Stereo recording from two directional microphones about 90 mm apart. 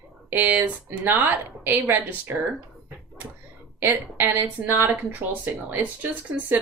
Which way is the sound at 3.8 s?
25° right (ahead or behind).